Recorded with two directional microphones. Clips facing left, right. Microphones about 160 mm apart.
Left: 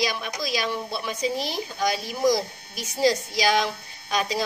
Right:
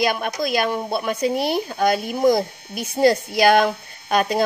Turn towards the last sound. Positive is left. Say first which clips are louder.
# right 6 dB
turn(degrees=-55)  # may be behind; listen again after turning